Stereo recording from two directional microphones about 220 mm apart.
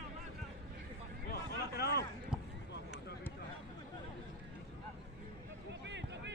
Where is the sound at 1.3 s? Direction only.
45° left (ahead or behind).